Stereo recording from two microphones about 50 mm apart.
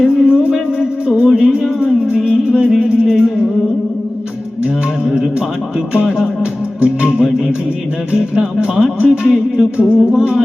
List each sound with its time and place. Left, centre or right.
0.0 s music: centre
4.6 s music: centre